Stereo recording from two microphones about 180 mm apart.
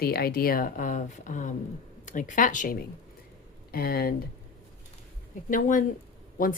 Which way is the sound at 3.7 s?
60° left (ahead or behind).